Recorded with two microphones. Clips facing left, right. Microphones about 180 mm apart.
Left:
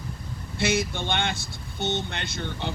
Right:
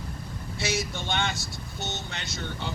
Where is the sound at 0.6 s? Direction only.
55° left (ahead or behind).